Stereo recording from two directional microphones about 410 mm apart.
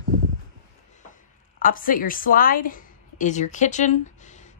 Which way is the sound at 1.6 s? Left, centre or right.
Centre.